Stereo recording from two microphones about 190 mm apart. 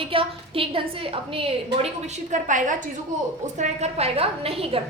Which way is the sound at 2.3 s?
40° right (ahead or behind).